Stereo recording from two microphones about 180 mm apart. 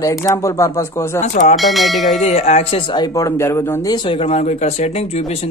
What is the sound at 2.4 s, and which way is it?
Speech, 35° left (ahead or behind).